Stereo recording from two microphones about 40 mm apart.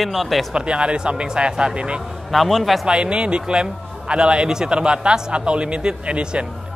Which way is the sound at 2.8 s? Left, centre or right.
Right.